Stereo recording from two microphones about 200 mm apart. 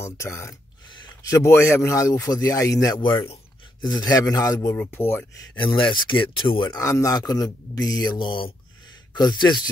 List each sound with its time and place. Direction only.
0.0 s a man's voice: 15° left (ahead or behind)
5.6 s speech: 25° left (ahead or behind)